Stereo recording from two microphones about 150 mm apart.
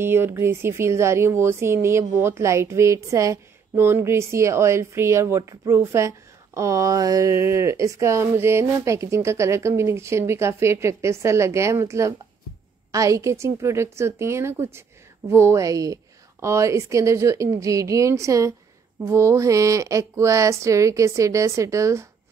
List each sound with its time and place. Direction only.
0.0 s speech: 15° right (ahead or behind)